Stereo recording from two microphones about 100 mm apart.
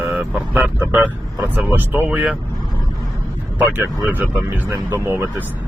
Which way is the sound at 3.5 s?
15° right (ahead or behind).